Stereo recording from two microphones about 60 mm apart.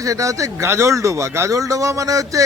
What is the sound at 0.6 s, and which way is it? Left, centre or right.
A man's voice, right.